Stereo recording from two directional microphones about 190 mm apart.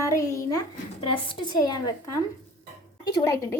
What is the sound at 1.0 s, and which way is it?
A child's voice, 30° left (ahead or behind).